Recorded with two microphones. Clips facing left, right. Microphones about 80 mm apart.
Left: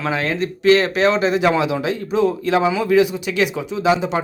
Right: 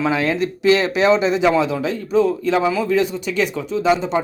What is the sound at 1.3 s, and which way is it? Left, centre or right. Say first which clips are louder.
Speech: right 1 dB; centre.